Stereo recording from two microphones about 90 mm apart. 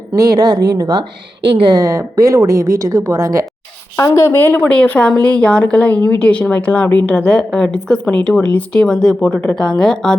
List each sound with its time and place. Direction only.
0.2 s a woman's voice: 45° right (ahead or behind)
1.5 s a woman's voice: 65° right (ahead or behind)
1.8 s speech: 40° right (ahead or behind)
3.9 s a woman's voice: 35° left (ahead or behind)
4.4 s a woman's voice: 20° left (ahead or behind)